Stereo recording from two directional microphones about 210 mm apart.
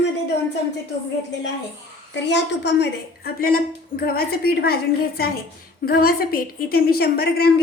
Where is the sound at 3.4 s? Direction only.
45° left (ahead or behind).